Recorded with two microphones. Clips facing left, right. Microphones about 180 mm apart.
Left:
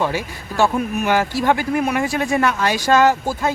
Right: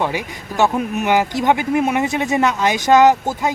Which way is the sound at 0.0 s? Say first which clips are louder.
Even; 15° right (ahead or behind).